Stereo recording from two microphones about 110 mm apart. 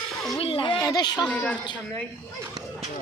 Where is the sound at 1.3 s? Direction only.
15° left (ahead or behind).